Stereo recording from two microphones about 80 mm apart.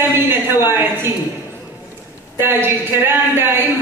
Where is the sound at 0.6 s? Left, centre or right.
Right.